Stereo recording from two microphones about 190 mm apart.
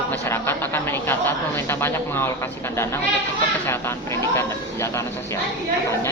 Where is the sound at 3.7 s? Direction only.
15° left (ahead or behind).